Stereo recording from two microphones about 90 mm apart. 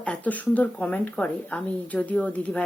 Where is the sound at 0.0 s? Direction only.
15° left (ahead or behind).